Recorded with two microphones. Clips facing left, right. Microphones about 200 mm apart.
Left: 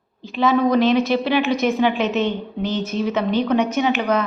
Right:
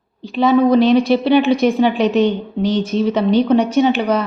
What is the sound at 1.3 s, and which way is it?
A woman's voice, 30° right (ahead or behind).